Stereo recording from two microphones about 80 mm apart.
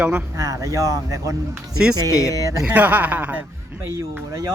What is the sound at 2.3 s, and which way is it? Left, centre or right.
Speech, right.